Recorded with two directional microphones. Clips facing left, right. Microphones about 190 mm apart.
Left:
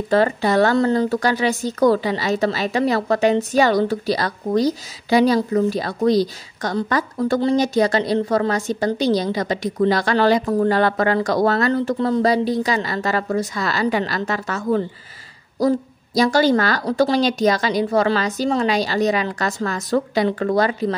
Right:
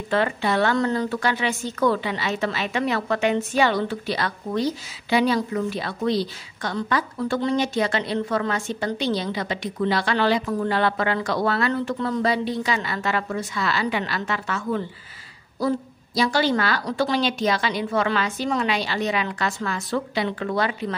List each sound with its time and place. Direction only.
0.1 s a woman's voice: 40° left (ahead or behind)
16.2 s a woman's voice: 40° left (ahead or behind)